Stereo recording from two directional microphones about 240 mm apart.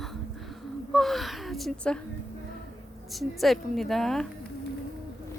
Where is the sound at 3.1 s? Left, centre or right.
Centre.